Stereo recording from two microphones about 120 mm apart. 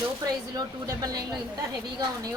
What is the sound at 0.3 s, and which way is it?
A woman's voice, 30° right (ahead or behind).